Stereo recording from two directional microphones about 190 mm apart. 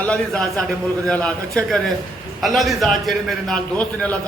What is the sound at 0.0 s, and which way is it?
A man's voice, 5° left (ahead or behind).